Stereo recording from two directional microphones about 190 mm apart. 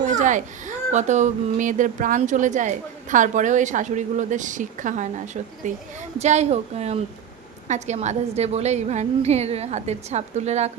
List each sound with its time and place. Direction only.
0.0 s speech: 40° right (ahead or behind)